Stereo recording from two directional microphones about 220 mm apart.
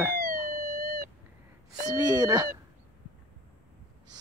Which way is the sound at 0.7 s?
40° right (ahead or behind).